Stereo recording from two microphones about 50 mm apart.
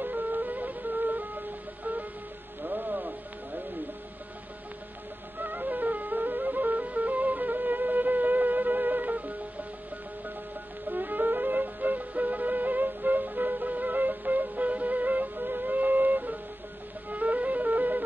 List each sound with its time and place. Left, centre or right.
0.0 s music: right
2.6 s music: right
5.4 s music: right
10.9 s music: right